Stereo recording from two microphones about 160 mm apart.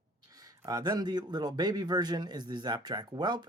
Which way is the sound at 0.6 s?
20° right (ahead or behind).